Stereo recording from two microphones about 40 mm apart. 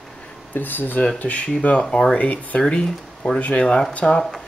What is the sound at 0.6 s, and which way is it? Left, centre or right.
Speech, left.